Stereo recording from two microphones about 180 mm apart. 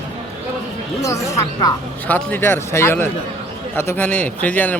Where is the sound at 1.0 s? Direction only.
15° left (ahead or behind).